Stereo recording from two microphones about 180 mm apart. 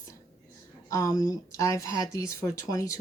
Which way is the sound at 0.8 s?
15° left (ahead or behind).